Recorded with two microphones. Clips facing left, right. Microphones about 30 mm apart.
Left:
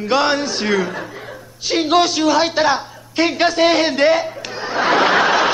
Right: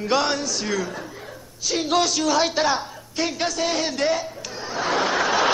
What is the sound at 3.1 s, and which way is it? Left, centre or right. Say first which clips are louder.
Chuckle: left 9 dB; left.